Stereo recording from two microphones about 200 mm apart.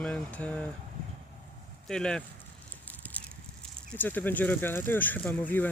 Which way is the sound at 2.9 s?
10° left (ahead or behind).